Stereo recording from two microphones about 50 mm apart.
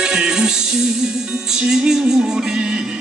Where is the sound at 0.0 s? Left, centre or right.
Centre.